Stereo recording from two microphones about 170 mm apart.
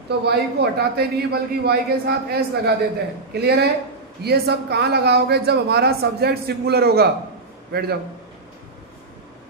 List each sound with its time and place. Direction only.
0.3 s a man's voice: 70° right (ahead or behind)